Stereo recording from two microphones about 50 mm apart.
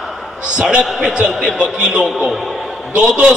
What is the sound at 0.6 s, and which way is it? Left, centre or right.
Speech, centre.